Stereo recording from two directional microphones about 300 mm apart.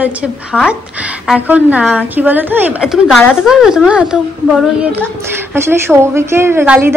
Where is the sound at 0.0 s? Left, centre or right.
Centre.